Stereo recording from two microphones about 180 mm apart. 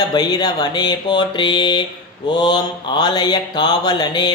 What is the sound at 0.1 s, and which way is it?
Speech, 20° left (ahead or behind).